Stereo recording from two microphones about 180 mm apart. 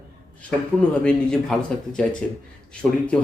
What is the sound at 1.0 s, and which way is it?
Speech, 5° left (ahead or behind).